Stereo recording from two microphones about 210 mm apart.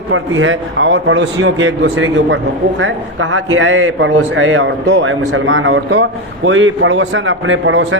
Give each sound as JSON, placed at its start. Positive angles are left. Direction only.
{"t": 0.1, "sound": "a man's voice", "side_deg": -70}